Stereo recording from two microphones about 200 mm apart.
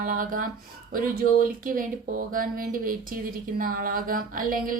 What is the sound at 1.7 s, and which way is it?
Speech, 45° right (ahead or behind).